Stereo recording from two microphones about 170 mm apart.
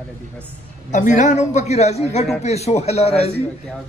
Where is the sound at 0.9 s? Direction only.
45° left (ahead or behind).